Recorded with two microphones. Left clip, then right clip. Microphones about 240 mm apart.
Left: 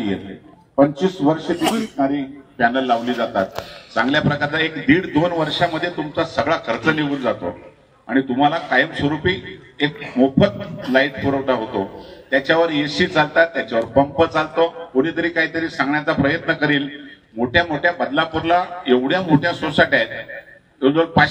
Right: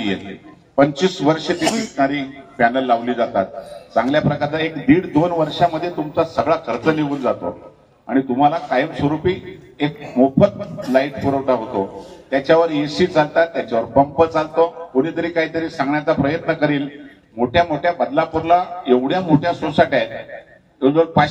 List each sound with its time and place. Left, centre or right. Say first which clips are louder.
0.7 s a man's voice: right 1 dB; right
1.6 s speech: right 1 dB; left
2.0 s a man's voice: right 2 dB; right